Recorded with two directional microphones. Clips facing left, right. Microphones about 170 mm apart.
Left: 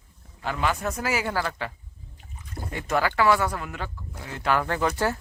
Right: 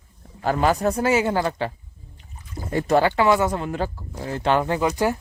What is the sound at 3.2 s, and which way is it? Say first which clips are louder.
Speech: right 3 dB; 20° right (ahead or behind).